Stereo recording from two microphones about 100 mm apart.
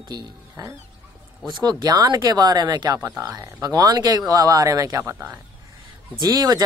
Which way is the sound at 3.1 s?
15° right (ahead or behind).